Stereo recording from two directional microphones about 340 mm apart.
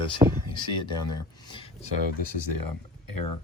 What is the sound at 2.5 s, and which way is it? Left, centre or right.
Speech, left.